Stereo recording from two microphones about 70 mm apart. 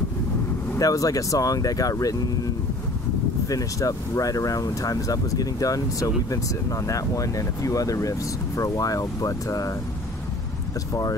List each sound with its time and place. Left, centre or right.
0.7 s speech: left